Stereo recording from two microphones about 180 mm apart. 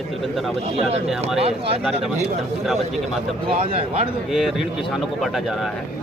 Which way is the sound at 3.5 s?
35° right (ahead or behind).